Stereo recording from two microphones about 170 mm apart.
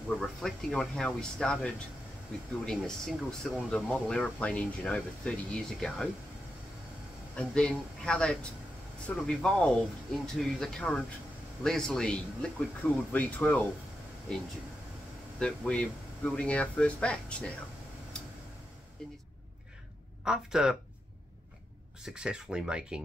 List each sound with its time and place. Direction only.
0.2 s speech: centre (ahead or behind)
7.3 s speech: 5° left (ahead or behind)
15.3 s speech: 5° left (ahead or behind)
20.2 s speech: 5° right (ahead or behind)
22.0 s speech: 5° right (ahead or behind)